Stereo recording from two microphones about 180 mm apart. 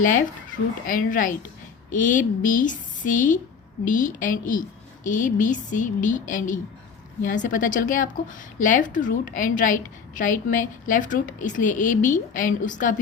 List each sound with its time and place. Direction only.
0.9 s a woman's voice: 50° left (ahead or behind)